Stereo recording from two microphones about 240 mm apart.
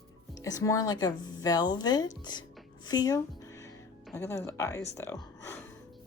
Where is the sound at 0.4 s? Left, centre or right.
Centre.